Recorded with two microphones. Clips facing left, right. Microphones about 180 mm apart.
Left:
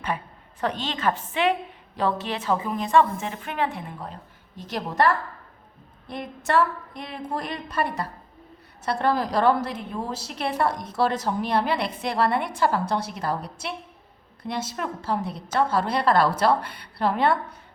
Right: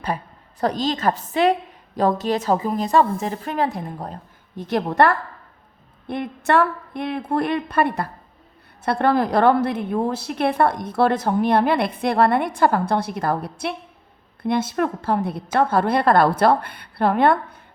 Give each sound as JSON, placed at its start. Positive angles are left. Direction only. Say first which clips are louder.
{"t": 0.6, "sound": "a woman's voice", "louder": "right 5 dB", "side_deg": -40}